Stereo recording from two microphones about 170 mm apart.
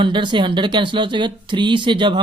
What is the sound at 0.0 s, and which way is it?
Speech, 30° right (ahead or behind).